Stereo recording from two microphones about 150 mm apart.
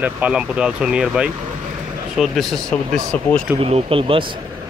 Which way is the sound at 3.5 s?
40° right (ahead or behind).